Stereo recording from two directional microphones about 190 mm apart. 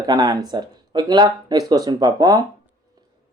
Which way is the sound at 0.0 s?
20° right (ahead or behind).